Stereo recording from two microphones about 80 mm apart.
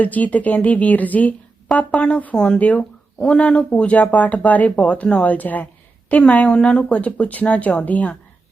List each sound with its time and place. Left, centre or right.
0.0 s speech: centre